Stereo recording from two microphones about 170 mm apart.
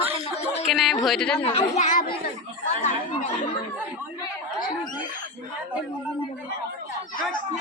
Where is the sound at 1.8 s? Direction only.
50° left (ahead or behind).